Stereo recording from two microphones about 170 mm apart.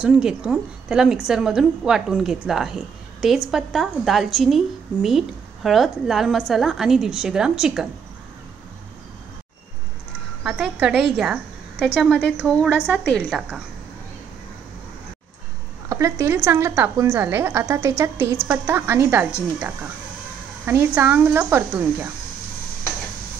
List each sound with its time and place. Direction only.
0.0 s a woman's voice: 5° right (ahead or behind)
10.4 s a woman's voice: 5° right (ahead or behind)
15.9 s a woman's voice: 15° right (ahead or behind)
20.6 s a woman's voice: 10° right (ahead or behind)